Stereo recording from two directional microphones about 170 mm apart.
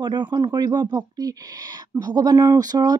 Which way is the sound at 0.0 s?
25° right (ahead or behind).